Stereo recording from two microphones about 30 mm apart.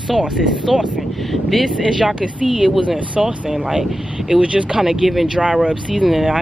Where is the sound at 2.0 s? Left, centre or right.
Right.